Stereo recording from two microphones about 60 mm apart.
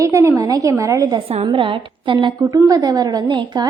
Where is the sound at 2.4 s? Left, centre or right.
Right.